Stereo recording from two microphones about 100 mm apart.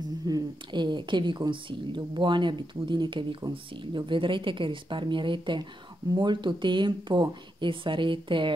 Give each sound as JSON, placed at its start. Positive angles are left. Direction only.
{"t": 0.3, "sound": "a woman's voice", "side_deg": -50}